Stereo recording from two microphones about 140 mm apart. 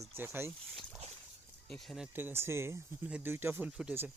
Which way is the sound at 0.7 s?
Centre (ahead or behind).